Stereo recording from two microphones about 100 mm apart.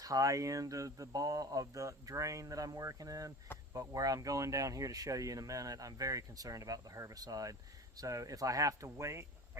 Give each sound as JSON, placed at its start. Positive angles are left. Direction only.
{"t": 0.0, "sound": "speech", "side_deg": -35}